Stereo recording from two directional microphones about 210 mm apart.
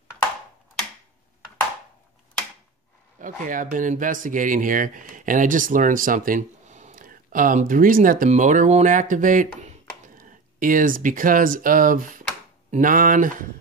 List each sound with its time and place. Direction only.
3.2 s speech: 40° right (ahead or behind)